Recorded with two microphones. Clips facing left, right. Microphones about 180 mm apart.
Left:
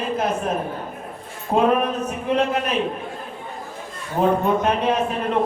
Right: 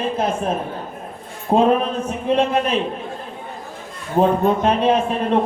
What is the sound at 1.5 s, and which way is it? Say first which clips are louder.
Music: right 2 dB; 30° right (ahead or behind).